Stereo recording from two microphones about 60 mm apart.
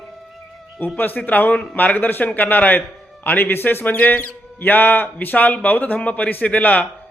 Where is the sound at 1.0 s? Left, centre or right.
Left.